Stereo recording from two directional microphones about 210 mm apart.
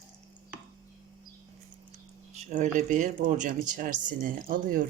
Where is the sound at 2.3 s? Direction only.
35° right (ahead or behind).